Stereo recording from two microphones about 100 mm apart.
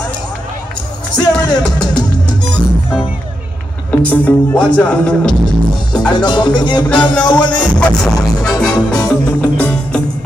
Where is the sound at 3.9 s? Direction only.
15° left (ahead or behind).